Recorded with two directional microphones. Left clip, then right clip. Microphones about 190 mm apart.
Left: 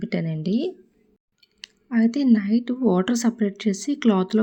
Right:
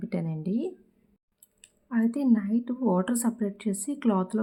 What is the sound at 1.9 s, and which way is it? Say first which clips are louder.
Speech: left 5 dB; 15° left (ahead or behind).